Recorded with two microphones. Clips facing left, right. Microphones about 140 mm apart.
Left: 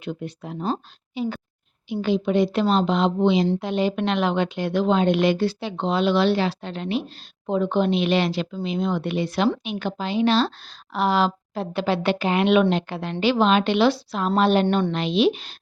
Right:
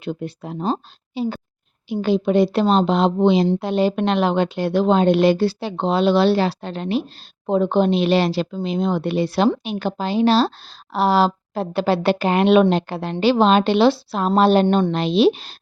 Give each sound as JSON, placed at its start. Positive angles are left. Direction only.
{"t": 0.0, "sound": "a woman's voice", "side_deg": -35}